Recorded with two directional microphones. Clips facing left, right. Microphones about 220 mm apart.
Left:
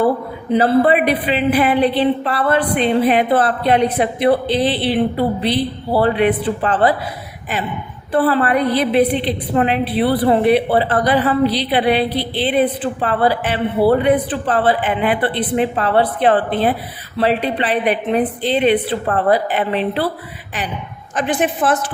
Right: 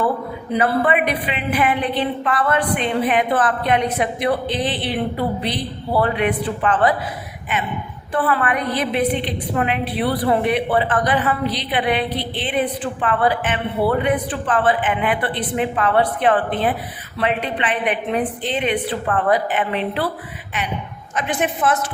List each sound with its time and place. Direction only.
0.5 s speech: 35° left (ahead or behind)
8.1 s speech: 35° left (ahead or behind)
21.2 s speech: 35° left (ahead or behind)